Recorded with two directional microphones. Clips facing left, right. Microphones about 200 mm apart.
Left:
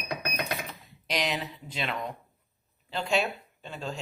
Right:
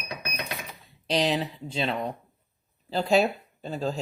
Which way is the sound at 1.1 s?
30° right (ahead or behind).